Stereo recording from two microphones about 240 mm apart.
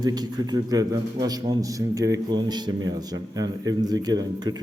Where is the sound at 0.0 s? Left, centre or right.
Centre.